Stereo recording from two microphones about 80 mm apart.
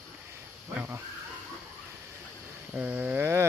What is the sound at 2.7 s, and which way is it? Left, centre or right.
Speech, centre.